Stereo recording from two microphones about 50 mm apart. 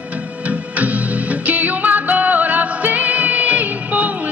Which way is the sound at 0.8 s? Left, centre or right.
Right.